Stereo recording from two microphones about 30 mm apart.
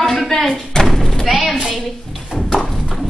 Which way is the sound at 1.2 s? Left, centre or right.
Centre.